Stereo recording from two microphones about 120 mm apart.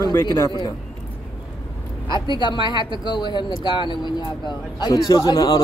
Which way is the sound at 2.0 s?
40° left (ahead or behind).